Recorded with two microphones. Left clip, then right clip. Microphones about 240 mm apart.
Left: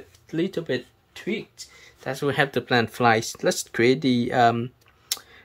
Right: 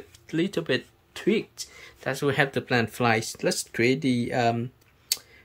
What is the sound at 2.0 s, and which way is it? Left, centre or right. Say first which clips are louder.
Speech: left 1 dB; centre.